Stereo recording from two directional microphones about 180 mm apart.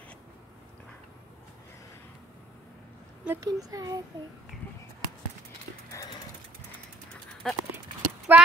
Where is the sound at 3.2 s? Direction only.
15° right (ahead or behind).